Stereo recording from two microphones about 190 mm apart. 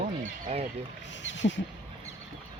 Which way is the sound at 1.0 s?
75° left (ahead or behind).